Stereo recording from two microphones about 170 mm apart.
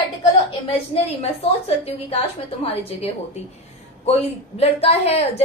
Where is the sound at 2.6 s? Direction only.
40° left (ahead or behind).